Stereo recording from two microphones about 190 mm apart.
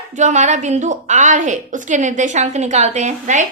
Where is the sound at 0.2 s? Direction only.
40° right (ahead or behind).